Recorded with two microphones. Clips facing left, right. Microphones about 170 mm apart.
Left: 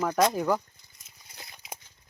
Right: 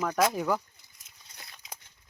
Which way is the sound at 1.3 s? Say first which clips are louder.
Left 3 dB; 25° left (ahead or behind).